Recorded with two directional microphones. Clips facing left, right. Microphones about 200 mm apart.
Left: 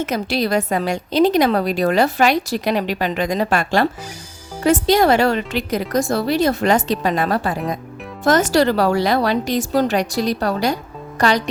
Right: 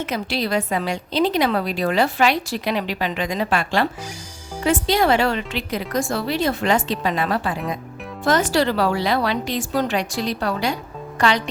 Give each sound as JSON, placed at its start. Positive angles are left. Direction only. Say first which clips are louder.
{"t": 0.0, "sound": "a woman's voice", "louder": "left 4 dB", "side_deg": 45}